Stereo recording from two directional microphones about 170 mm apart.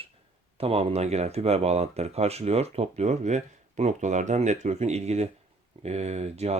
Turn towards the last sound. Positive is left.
turn(degrees=-40)  # may be behind; listen again after turning